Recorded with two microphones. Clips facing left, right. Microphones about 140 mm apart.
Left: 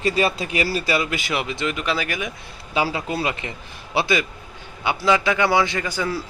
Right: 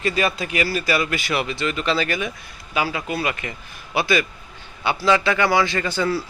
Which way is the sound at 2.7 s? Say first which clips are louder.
Left 1 dB; 30° left (ahead or behind).